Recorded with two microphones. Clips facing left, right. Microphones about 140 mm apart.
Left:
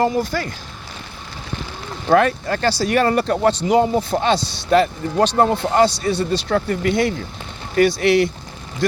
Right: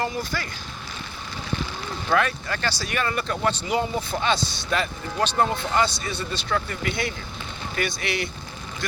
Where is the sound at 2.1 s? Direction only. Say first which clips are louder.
Left 8 dB; 40° left (ahead or behind).